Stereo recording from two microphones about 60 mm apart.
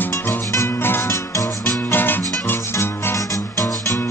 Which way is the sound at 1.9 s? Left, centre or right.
Left.